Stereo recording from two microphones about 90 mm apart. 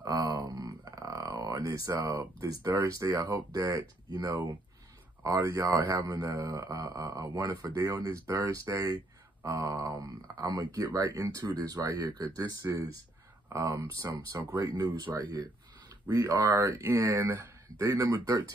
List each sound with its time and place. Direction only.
0.0 s a sound: 40° right (ahead or behind)
2.0 s speech: 40° right (ahead or behind)
11.4 s speech: 45° right (ahead or behind)
16.1 s speech: 40° right (ahead or behind)